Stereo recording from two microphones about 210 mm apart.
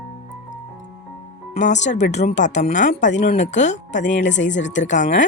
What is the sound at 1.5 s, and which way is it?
Speech, 35° left (ahead or behind).